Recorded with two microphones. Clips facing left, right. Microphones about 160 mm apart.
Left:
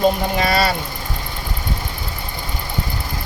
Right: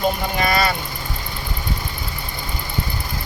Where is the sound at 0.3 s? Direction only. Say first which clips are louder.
Left 2 dB; 35° left (ahead or behind).